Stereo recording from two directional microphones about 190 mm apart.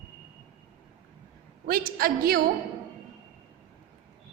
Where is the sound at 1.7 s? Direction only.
50° right (ahead or behind).